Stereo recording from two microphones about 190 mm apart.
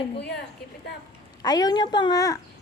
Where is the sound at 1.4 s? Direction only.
20° left (ahead or behind).